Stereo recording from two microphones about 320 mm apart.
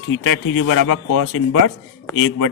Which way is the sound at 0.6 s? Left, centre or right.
Left.